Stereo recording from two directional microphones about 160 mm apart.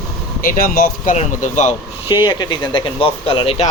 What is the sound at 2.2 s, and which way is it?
Speech, 30° left (ahead or behind).